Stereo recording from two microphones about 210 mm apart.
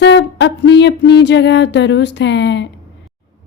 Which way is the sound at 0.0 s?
55° left (ahead or behind).